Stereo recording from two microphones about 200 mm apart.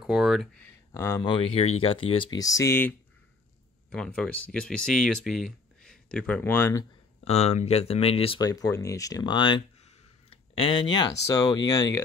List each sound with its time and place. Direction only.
0.0 s speech: 5° right (ahead or behind)
0.9 s speech: 15° left (ahead or behind)
3.9 s speech: 5° left (ahead or behind)
7.2 s speech: 30° left (ahead or behind)